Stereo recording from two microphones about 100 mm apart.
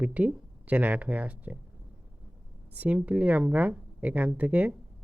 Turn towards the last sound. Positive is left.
turn(degrees=-15)  # may be behind; listen again after turning